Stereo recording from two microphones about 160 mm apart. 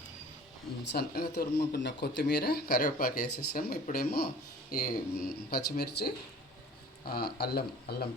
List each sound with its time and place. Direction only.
0.9 s speech: 75° left (ahead or behind)
1.8 s speech: 90° left
7.0 s speech: 70° left (ahead or behind)